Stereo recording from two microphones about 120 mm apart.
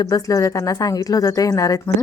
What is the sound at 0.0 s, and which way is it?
Speech, 30° left (ahead or behind).